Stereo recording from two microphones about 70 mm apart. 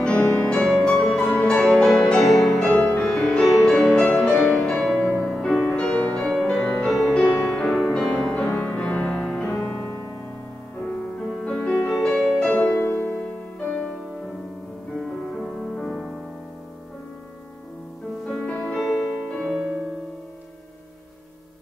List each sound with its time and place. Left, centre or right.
0.2 s music: left; by 2.7 s centre
2.7 s music: left
3.0 s music: centre
5.0 s music: left
5.3 s music: centre
5.6 s music: centre
11.4 s music: centre
12.5 s music: left
15.0 s music: centre
18.2 s music: centre
19.3 s music: centre